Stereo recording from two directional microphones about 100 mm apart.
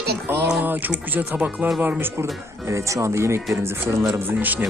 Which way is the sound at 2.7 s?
30° right (ahead or behind).